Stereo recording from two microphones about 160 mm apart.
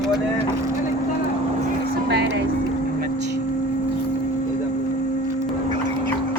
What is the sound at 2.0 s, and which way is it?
Speech, 90° right.